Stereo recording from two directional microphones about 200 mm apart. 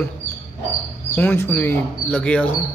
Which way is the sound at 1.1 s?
10° left (ahead or behind).